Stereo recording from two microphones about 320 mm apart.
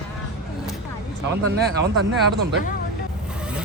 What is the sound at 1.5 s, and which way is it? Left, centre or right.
Speech, right.